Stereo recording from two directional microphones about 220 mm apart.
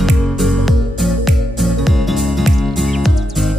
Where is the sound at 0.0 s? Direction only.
Centre (ahead or behind).